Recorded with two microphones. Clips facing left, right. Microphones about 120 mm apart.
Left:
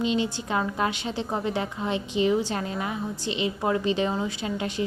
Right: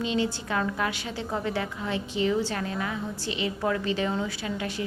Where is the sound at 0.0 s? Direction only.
20° left (ahead or behind).